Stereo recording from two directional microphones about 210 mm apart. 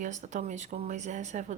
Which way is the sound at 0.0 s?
35° right (ahead or behind).